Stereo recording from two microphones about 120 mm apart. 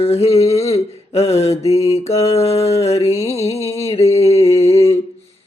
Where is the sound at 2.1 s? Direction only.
60° left (ahead or behind).